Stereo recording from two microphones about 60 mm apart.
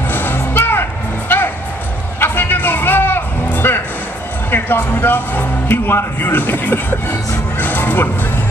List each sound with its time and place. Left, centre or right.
0.1 s music: left
4.5 s speech: left